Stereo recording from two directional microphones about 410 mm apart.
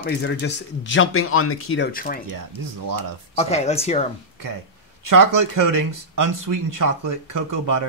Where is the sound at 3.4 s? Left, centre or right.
Centre.